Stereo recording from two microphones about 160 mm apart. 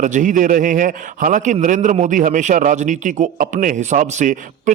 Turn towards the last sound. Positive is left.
turn(degrees=-50)  # may be behind; listen again after turning